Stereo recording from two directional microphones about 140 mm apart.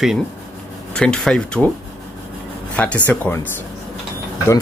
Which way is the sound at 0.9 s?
5° left (ahead or behind).